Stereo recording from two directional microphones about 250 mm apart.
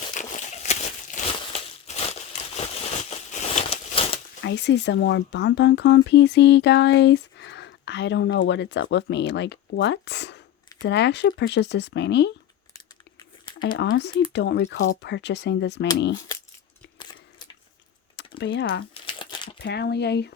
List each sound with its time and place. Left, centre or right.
0.1 s crumpling: left
4.4 s speech: left
13.6 s speech: left
18.2 s computer keyboard: left
19.0 s crumpling: centre
19.5 s speech: left